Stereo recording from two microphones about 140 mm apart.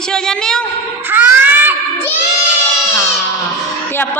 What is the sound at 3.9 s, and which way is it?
Speech, 15° left (ahead or behind).